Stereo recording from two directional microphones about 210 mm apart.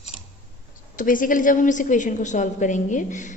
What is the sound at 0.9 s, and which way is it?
A woman's voice, 40° left (ahead or behind).